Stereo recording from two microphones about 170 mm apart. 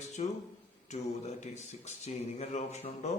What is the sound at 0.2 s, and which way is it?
A man's voice, 40° left (ahead or behind).